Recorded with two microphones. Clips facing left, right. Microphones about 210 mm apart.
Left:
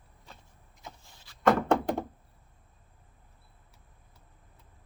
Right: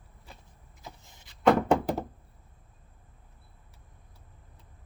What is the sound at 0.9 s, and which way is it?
Vehicle, 20° right (ahead or behind).